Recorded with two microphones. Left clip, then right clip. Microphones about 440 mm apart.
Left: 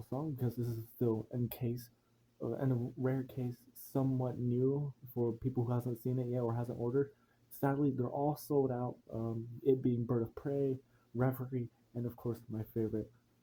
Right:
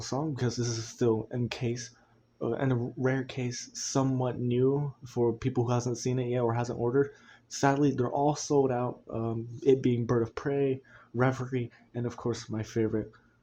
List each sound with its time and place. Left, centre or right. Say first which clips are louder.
0.1 s speech: right 8 dB; left